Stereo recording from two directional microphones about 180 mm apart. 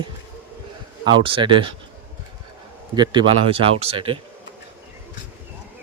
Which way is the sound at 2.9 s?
25° right (ahead or behind).